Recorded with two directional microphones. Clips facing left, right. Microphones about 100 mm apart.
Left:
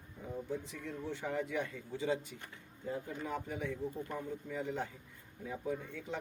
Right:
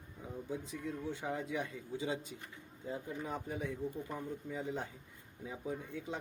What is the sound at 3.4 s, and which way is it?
A man's voice, 20° right (ahead or behind).